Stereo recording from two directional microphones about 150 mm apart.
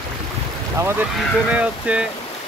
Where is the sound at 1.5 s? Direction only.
10° right (ahead or behind).